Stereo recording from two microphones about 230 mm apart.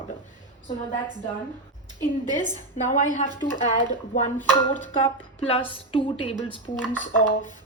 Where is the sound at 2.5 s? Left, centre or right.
Left.